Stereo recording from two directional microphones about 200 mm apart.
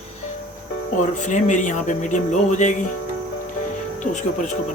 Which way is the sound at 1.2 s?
35° left (ahead or behind).